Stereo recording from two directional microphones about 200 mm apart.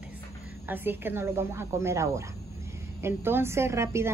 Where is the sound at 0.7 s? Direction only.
10° right (ahead or behind).